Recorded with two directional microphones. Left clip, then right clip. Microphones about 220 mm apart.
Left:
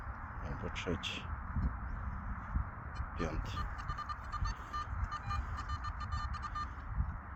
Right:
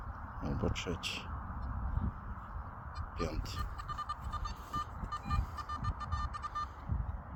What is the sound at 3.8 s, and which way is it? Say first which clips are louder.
Music: right 1 dB; 50° left (ahead or behind).